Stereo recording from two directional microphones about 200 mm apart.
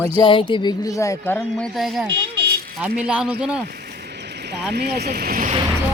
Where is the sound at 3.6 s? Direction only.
50° right (ahead or behind).